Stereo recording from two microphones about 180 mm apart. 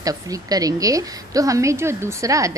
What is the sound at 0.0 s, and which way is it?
A woman's voice, 20° right (ahead or behind).